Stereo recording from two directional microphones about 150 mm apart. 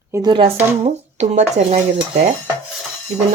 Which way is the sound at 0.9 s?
50° right (ahead or behind).